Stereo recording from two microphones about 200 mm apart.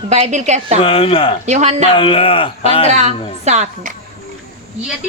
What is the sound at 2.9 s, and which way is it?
A woman's voice, 35° right (ahead or behind).